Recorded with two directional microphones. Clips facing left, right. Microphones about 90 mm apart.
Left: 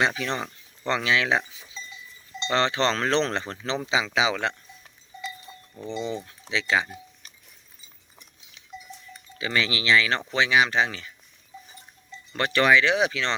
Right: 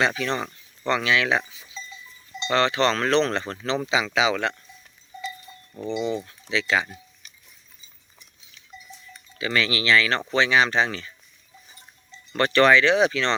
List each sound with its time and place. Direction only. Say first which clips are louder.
0.0 s speech: right 2 dB; 20° left (ahead or behind)
5.5 s livestock: left 1 dB; 25° left (ahead or behind)
5.9 s speech: right 4 dB; 15° right (ahead or behind)
6.5 s speech: right 1 dB; 20° left (ahead or behind)
8.7 s livestock: left 4 dB; 90° left
9.4 s speech: right 2 dB; 20° left (ahead or behind)
12.4 s speech: right 3 dB; 10° left (ahead or behind)